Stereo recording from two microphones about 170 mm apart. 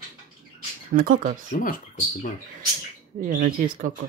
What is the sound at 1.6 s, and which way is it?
Speech, 55° left (ahead or behind).